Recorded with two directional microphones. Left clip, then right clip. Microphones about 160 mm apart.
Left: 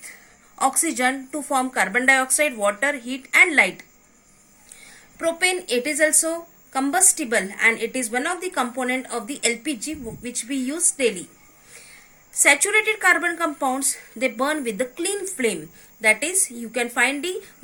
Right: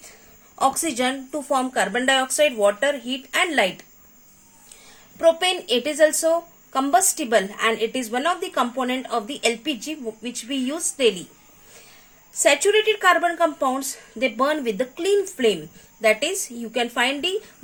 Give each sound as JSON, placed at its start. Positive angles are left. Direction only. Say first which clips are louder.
{"t": 0.6, "sound": "a woman's voice", "louder": "even", "side_deg": -45}
{"t": 5.2, "sound": "a woman's voice", "louder": "right 4 dB", "side_deg": -45}
{"t": 12.3, "sound": "a woman's voice", "louder": "even", "side_deg": -45}